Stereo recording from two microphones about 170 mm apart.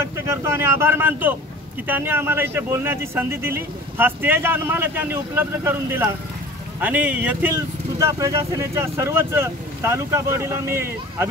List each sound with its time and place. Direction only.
0.0 s speech: 15° right (ahead or behind)